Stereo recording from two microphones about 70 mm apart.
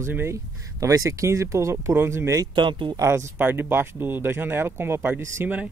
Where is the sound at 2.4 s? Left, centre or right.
Right.